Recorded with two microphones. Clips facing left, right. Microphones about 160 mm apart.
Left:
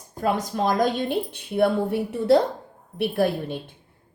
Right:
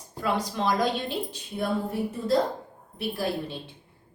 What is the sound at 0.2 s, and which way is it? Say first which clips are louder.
A woman's voice: left 4 dB; 45° left (ahead or behind).